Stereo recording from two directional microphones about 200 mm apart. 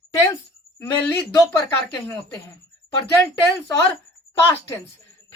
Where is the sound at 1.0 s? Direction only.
10° left (ahead or behind).